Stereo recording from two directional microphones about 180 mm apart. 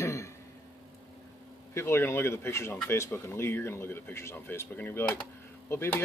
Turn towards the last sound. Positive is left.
turn(degrees=15)  # may be behind; listen again after turning